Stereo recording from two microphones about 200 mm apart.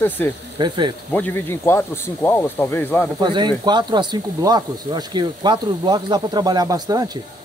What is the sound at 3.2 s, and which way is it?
Speech, 25° right (ahead or behind).